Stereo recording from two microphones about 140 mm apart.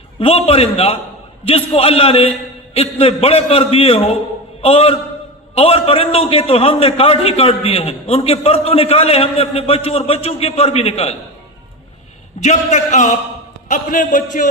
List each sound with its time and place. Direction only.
0.2 s a man's voice: 45° left (ahead or behind)
12.4 s a man's voice: 55° left (ahead or behind)